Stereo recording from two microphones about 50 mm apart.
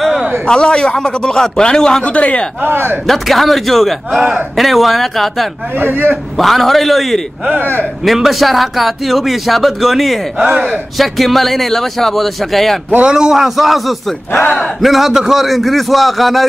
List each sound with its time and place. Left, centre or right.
0.5 s a man's voice: centre
2.0 s a man's voice: left
2.6 s speech: right
3.1 s a man's voice: centre
4.1 s a man's voice: centre
4.6 s a man's voice: centre
5.8 s speech: right
6.3 s a man's voice: centre
10.4 s a man's voice: centre
11.0 s a man's voice: centre
13.0 s a man's voice: centre